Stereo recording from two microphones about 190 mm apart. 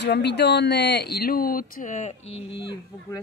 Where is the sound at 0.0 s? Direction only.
65° left (ahead or behind); by 2.4 s 35° left (ahead or behind).